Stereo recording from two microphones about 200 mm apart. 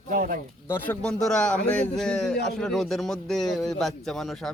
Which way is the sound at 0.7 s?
5° left (ahead or behind).